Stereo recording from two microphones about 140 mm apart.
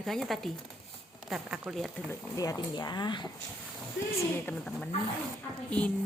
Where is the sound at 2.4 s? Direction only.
30° left (ahead or behind).